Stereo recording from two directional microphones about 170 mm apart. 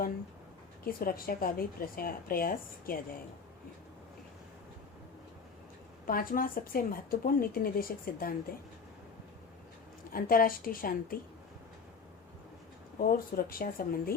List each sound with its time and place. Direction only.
0.9 s speech: 60° left (ahead or behind)
6.1 s speech: 55° left (ahead or behind)
10.1 s speech: 55° left (ahead or behind)
13.0 s speech: 60° left (ahead or behind)